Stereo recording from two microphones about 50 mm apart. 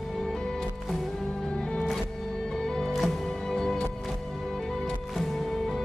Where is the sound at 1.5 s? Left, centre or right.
Centre.